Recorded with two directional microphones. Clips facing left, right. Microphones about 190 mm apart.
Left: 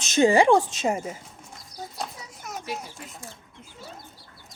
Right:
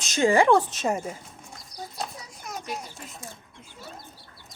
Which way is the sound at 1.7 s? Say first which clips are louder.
Even; centre (ahead or behind).